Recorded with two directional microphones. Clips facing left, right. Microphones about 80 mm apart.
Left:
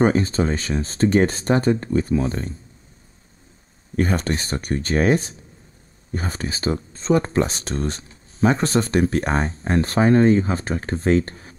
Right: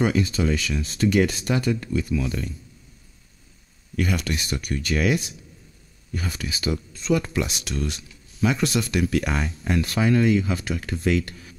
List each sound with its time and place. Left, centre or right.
0.0 s speech: left
3.9 s speech: left